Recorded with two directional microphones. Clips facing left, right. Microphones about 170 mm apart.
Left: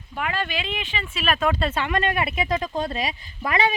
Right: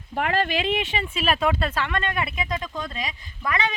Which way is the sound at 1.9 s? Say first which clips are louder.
Left 3 dB; 25° left (ahead or behind).